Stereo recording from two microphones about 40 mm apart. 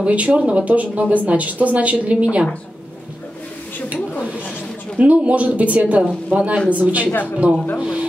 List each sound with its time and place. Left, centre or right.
0.0 s a woman's voice: right
4.9 s a woman's voice: right
7.1 s speech: left
7.8 s music: right